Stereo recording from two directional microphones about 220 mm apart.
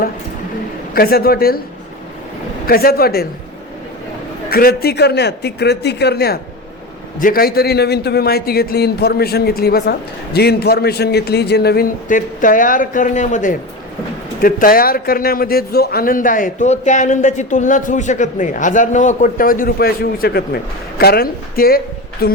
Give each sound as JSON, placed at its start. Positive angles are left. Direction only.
{"t": 0.9, "sound": "a man's voice", "side_deg": 45}
{"t": 2.6, "sound": "a man's voice", "side_deg": 45}
{"t": 4.4, "sound": "a man's voice", "side_deg": 45}